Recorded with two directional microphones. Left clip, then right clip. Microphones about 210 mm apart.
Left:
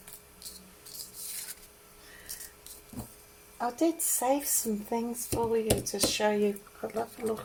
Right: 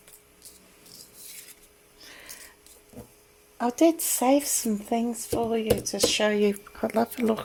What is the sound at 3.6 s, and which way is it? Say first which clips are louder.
Speech: right 7 dB; 50° right (ahead or behind).